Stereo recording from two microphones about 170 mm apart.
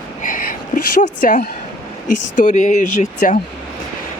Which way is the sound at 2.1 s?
50° left (ahead or behind).